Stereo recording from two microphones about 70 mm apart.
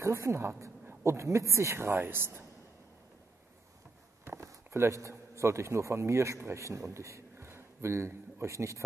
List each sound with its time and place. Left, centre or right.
0.0 s speech: right
4.2 s a man's voice: right